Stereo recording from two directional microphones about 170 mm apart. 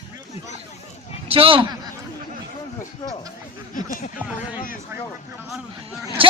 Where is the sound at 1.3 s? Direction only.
35° right (ahead or behind).